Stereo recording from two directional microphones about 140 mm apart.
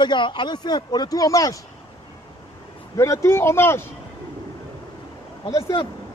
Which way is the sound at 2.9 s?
20° left (ahead or behind).